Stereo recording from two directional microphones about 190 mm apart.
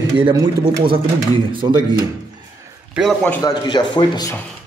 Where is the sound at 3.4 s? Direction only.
25° left (ahead or behind).